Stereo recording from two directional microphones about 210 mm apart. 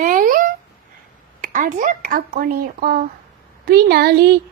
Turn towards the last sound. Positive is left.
turn(degrees=-45)  # may be behind; listen again after turning